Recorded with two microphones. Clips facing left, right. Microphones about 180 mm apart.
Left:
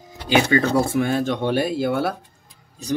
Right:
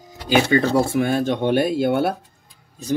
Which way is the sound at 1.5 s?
55° right (ahead or behind).